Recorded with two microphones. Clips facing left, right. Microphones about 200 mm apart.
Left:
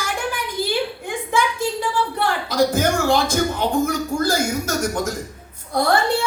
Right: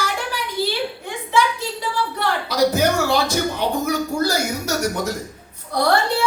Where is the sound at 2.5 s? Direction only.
50° left (ahead or behind).